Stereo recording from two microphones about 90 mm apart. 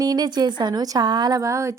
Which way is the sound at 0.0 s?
50° right (ahead or behind).